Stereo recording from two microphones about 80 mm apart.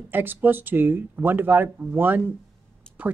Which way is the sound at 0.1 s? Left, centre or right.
Right.